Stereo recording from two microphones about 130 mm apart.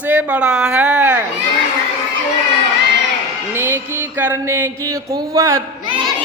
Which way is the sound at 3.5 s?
20° right (ahead or behind).